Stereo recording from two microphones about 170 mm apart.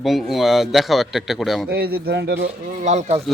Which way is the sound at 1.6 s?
65° right (ahead or behind).